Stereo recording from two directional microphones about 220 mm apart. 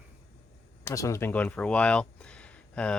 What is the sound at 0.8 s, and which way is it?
Speech, 15° left (ahead or behind).